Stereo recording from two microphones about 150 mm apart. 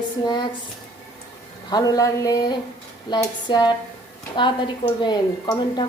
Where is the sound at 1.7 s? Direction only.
25° left (ahead or behind).